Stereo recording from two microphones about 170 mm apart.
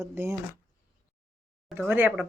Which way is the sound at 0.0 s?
15° right (ahead or behind).